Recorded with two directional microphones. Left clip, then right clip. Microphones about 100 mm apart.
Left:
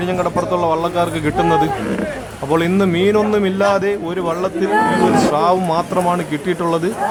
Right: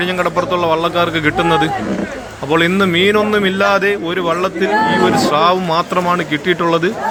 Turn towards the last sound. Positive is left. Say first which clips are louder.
# right 4 dB
turn(degrees=5)  # may be behind; listen again after turning